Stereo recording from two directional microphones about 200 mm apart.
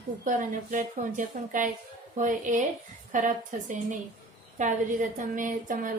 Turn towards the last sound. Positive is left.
turn(degrees=-40)  # may be behind; listen again after turning